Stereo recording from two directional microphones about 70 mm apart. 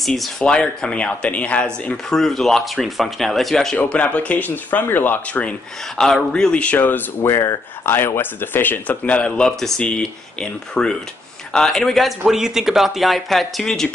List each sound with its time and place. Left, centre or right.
0.0 s speech: centre
0.4 s speech: centre
2.0 s speech: centre
3.7 s speech: centre
6.0 s speech: centre; by 7.0 s left
7.2 s speech: left
7.8 s speech: left; by 12.1 s centre
12.3 s speech: centre